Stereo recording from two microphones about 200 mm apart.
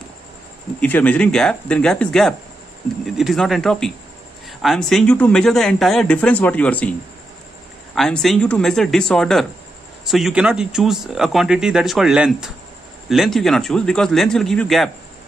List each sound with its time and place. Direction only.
0.7 s speech: 10° left (ahead or behind)